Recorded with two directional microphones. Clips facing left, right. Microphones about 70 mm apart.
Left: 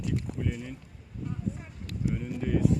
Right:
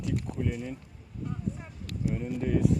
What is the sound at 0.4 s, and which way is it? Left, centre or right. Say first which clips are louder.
Speech: right 1 dB; centre.